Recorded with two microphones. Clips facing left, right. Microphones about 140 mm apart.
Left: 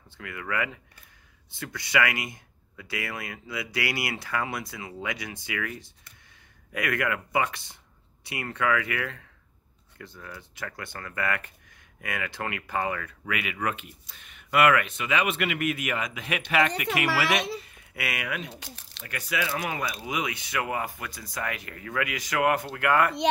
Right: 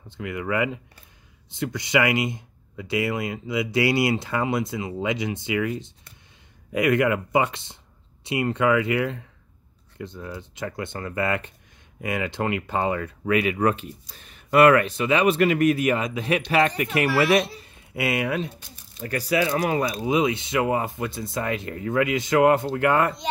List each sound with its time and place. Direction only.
0.2 s speech: 20° right (ahead or behind)
13.2 s speech: 35° right (ahead or behind)
17.7 s speech: 25° right (ahead or behind)
18.5 s speech: 80° left
19.0 s speech: 35° right (ahead or behind)